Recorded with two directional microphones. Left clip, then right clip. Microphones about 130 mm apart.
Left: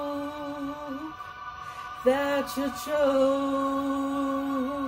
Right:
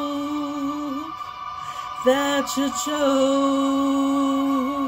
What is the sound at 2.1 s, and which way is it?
Music, 20° right (ahead or behind).